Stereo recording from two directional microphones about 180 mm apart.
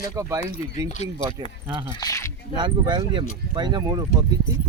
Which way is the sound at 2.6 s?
25° right (ahead or behind).